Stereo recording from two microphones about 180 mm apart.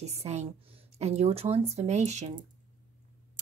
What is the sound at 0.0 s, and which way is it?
Speech, 35° right (ahead or behind).